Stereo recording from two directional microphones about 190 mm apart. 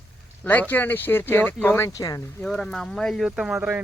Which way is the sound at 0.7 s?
10° left (ahead or behind).